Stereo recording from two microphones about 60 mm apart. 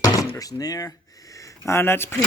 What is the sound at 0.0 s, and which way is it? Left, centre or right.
Door, left.